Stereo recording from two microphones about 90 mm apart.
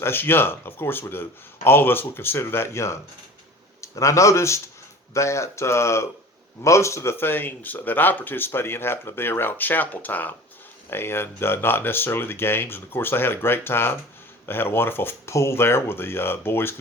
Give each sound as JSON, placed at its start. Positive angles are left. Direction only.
{"t": 0.0, "sound": "speech", "side_deg": 25}